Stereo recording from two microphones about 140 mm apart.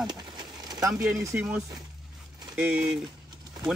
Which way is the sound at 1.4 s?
5° right (ahead or behind).